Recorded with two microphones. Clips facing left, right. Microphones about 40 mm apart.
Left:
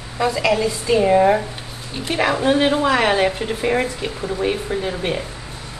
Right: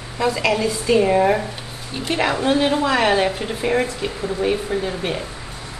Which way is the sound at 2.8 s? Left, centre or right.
Centre.